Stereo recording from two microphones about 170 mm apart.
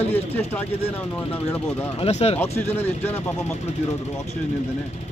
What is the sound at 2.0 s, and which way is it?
Speech, 35° left (ahead or behind).